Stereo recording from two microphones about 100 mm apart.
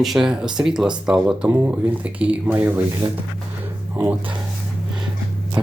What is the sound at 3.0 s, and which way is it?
Speech, 60° right (ahead or behind).